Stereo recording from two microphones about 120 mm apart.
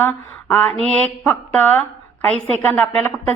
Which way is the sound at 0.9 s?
10° left (ahead or behind).